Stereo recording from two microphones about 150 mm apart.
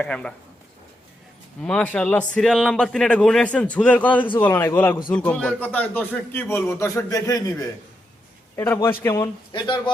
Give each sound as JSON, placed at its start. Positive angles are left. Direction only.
{"t": 0.0, "sound": "speech", "side_deg": 5}
{"t": 1.6, "sound": "speech", "side_deg": 10}
{"t": 8.5, "sound": "speech", "side_deg": 15}
{"t": 9.1, "sound": "a man's voice", "side_deg": 25}